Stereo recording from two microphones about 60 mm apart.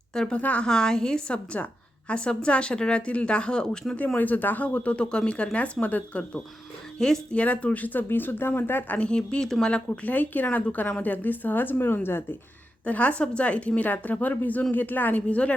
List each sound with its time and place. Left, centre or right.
0.1 s a woman's voice: centre
0.3 s a woman's voice: left
1.6 s a woman's voice: left
4.2 s a woman's voice: left
7.0 s a woman's voice: centre
7.3 s speech: left
9.0 s a woman's voice: centre
10.1 s a woman's voice: left
12.8 s a woman's voice: left